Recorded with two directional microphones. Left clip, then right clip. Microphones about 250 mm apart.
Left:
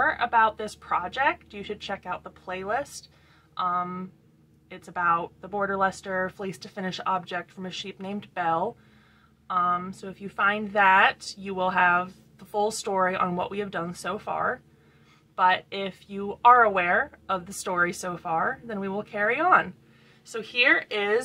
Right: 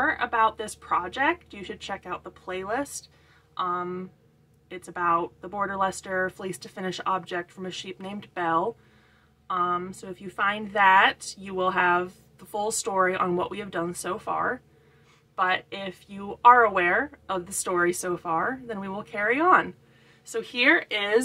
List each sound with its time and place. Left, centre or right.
0.0 s a woman's voice: centre